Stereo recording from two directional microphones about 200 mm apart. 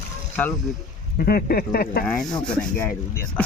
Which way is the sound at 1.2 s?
45° left (ahead or behind).